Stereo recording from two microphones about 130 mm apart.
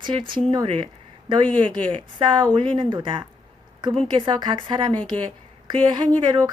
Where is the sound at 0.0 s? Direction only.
40° right (ahead or behind).